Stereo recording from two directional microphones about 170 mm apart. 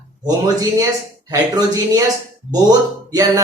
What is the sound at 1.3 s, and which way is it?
Speech, 20° right (ahead or behind).